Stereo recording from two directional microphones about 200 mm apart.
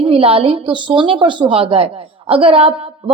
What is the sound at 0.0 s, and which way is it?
A woman's voice, 30° right (ahead or behind).